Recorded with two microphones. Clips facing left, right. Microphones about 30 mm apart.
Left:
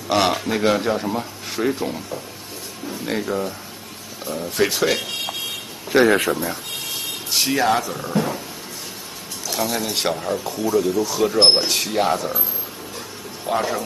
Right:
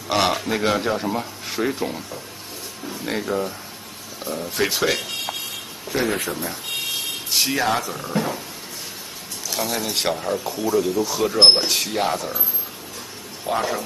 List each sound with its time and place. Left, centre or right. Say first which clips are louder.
0.1 s speech: left 1 dB; centre
5.9 s speech: left 8 dB; left
6.3 s speech: left 4 dB; centre
7.2 s speech: left 2 dB; centre
9.5 s speech: left 2 dB; centre
13.5 s speech: left 1 dB; centre